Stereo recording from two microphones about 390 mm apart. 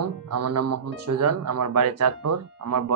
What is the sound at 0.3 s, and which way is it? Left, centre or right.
Speech, right.